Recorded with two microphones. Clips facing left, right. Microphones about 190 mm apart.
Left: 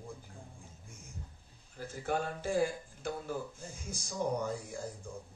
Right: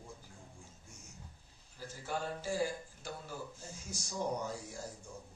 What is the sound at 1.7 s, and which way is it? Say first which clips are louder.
Speech: left 6 dB; 55° left (ahead or behind).